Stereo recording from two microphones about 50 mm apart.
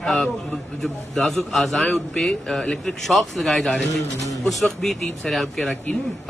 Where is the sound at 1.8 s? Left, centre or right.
Left.